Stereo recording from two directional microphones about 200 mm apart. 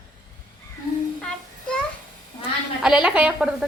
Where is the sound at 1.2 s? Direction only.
5° left (ahead or behind).